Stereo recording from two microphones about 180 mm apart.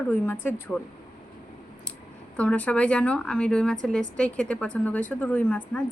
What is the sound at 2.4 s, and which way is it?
A woman's voice, 5° left (ahead or behind).